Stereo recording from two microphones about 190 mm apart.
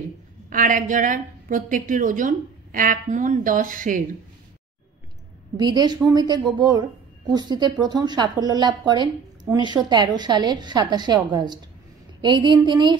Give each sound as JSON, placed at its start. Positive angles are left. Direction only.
{"t": 0.5, "sound": "a woman's voice", "side_deg": -45}
{"t": 5.6, "sound": "a woman's voice", "side_deg": -20}